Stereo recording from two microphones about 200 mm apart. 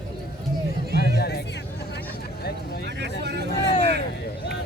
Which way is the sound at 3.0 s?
55° right (ahead or behind).